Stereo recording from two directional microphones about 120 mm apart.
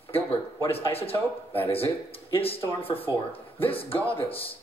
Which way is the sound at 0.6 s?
55° left (ahead or behind).